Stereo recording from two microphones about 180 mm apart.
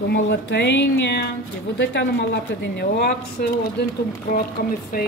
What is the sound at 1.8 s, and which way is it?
Speech, 85° left.